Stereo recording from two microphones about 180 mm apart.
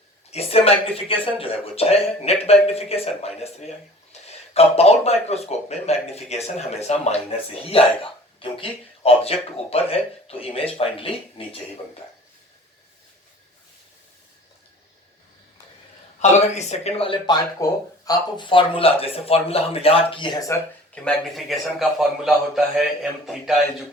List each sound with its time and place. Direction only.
0.3 s speech: 35° left (ahead or behind)
16.6 s speech: 40° left (ahead or behind); by 20.6 s 20° left (ahead or behind)
20.9 s a man's voice: 5° left (ahead or behind)